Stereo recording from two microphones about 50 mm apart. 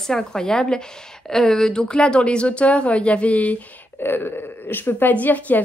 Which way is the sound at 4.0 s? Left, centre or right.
Left.